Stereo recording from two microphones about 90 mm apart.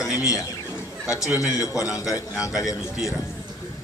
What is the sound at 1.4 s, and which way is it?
A man's voice, 40° left (ahead or behind).